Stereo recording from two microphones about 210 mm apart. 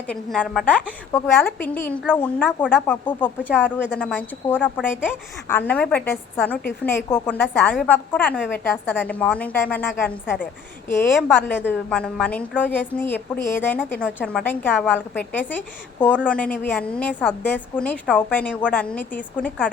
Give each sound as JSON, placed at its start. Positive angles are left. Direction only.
{"t": 0.1, "sound": "a woman's voice", "side_deg": 5}